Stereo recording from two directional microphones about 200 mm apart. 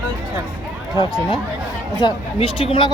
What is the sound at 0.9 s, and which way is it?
Speech, 20° left (ahead or behind).